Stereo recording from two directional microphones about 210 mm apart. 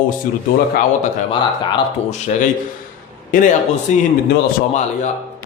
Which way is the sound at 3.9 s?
35° left (ahead or behind).